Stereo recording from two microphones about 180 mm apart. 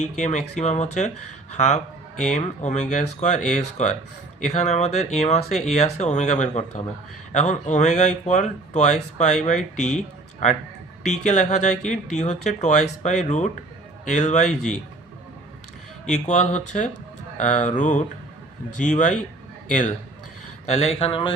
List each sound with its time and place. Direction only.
0.0 s a man's voice: 40° left (ahead or behind)
16.0 s a man's voice: 40° left (ahead or behind)